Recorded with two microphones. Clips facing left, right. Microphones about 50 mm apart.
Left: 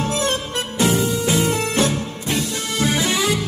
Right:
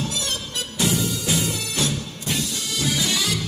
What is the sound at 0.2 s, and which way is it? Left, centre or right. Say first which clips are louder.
Music: left 7 dB; left.